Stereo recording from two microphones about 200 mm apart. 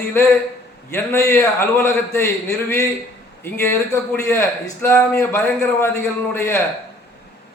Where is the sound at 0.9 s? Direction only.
15° left (ahead or behind).